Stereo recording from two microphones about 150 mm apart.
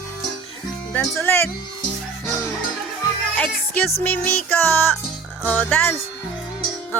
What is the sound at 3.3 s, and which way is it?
Music, 10° left (ahead or behind).